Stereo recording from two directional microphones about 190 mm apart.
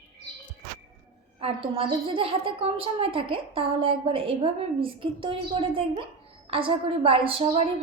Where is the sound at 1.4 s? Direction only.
30° right (ahead or behind).